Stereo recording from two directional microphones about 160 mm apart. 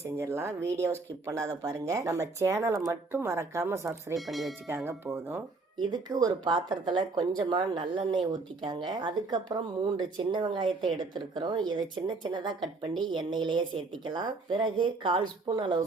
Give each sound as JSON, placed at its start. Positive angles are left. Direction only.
{"t": 0.2, "sound": "speech", "side_deg": -15}
{"t": 4.3, "sound": "speech", "side_deg": 0}
{"t": 4.7, "sound": "speech", "side_deg": -15}
{"t": 5.7, "sound": "speech", "side_deg": -25}